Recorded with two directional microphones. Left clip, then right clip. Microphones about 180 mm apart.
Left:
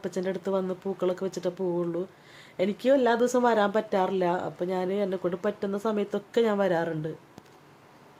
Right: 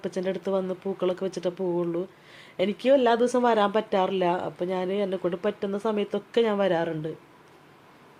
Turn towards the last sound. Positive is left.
turn(degrees=0)  # may be behind; listen again after turning